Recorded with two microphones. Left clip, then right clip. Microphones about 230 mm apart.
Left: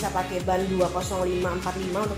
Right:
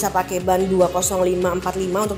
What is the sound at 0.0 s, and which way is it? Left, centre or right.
A woman's voice, right.